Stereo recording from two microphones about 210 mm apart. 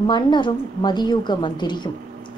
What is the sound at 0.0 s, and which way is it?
A woman's voice, 20° left (ahead or behind).